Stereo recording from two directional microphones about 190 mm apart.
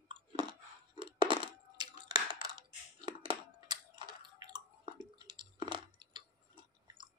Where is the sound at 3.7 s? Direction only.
20° right (ahead or behind).